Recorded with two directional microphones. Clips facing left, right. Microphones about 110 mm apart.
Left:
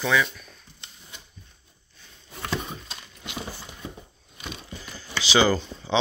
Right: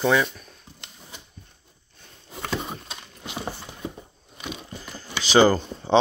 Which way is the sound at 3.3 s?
40° right (ahead or behind).